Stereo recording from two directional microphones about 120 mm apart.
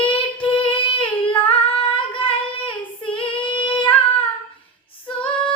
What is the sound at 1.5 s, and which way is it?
Child singing, 45° left (ahead or behind).